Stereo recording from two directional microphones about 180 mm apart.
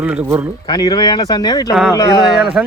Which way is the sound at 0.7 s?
20° left (ahead or behind).